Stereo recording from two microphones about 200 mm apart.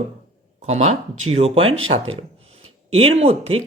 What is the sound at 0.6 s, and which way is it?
Speech, 35° right (ahead or behind).